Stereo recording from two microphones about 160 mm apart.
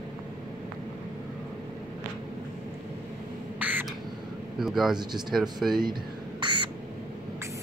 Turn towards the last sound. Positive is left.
turn(degrees=-30)  # may be behind; listen again after turning